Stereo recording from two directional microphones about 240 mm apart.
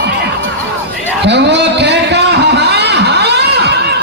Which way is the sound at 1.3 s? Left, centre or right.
Right.